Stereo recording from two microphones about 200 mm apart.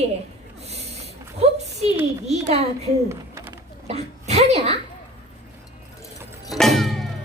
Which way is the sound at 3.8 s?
30° right (ahead or behind).